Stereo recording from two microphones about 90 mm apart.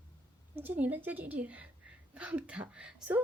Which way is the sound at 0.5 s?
20° right (ahead or behind).